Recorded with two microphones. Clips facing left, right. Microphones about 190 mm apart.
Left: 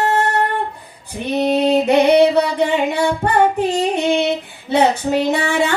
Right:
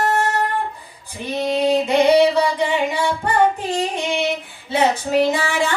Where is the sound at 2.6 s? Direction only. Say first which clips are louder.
Left 3 dB; 60° left (ahead or behind).